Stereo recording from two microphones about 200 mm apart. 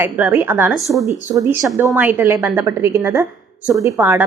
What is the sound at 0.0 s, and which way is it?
A woman's voice, 10° right (ahead or behind).